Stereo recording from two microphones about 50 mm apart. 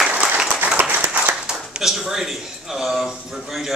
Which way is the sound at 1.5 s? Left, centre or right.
Centre.